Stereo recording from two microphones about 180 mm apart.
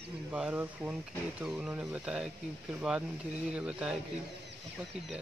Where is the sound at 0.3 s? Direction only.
5° right (ahead or behind).